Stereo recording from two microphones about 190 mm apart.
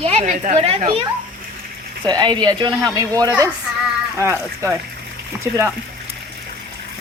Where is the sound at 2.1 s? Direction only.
20° right (ahead or behind).